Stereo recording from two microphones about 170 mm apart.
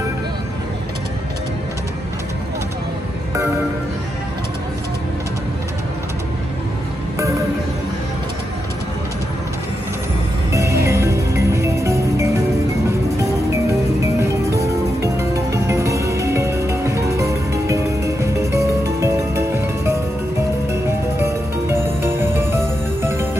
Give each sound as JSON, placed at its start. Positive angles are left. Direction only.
{"t": 10.5, "sound": "music", "side_deg": -15}
{"t": 14.2, "sound": "music", "side_deg": -15}
{"t": 21.2, "sound": "music", "side_deg": -15}